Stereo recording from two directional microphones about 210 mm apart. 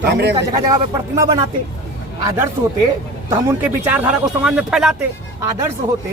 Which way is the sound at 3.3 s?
10° right (ahead or behind).